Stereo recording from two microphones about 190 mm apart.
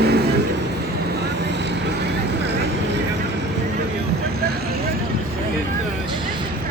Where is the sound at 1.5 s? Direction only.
65° right (ahead or behind).